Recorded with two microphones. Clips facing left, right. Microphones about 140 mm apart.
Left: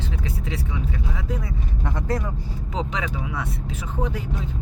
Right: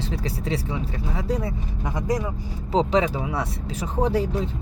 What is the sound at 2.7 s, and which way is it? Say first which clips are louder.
Speech: right 8 dB; 35° right (ahead or behind).